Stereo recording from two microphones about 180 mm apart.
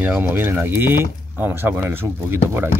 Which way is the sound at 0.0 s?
10° right (ahead or behind).